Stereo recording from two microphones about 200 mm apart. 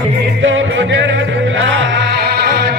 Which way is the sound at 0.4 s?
70° right (ahead or behind).